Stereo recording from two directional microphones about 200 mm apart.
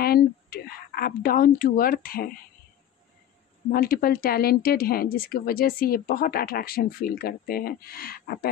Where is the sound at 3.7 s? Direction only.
45° left (ahead or behind).